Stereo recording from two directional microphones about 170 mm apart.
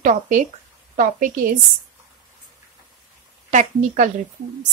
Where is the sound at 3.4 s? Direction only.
45° right (ahead or behind).